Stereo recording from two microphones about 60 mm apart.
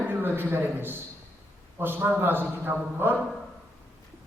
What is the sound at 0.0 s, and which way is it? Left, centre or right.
A man's voice, right.